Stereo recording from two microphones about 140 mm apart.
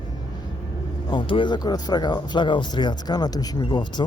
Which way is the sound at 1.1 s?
35° left (ahead or behind).